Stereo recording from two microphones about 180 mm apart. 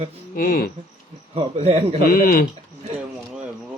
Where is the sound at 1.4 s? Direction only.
35° right (ahead or behind).